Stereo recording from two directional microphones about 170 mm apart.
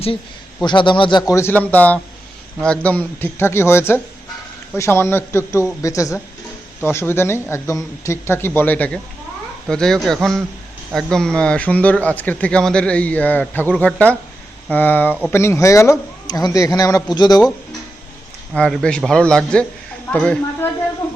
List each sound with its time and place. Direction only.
0.6 s a man's voice: 30° left (ahead or behind)
18.5 s a man's voice: 5° left (ahead or behind)